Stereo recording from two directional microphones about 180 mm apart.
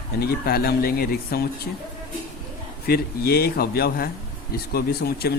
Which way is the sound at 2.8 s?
60° left (ahead or behind).